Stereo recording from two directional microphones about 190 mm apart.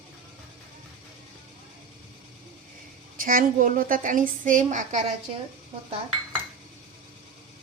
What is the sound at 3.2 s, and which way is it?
A woman's voice, 45° right (ahead or behind).